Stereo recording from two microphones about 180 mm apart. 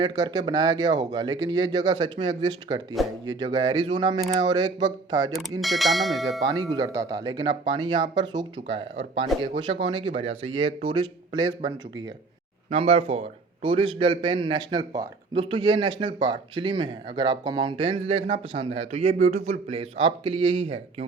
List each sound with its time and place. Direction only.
0.0 s speech: 20° right (ahead or behind)
5.4 s speech: centre (ahead or behind)
6.5 s speech: 25° right (ahead or behind)